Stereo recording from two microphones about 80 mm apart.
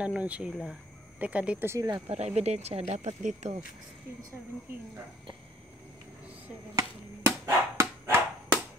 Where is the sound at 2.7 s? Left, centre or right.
Right.